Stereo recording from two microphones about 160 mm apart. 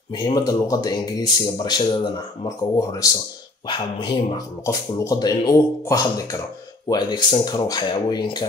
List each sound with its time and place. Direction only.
0.1 s speech: 25° left (ahead or behind)
4.6 s speech: 20° left (ahead or behind)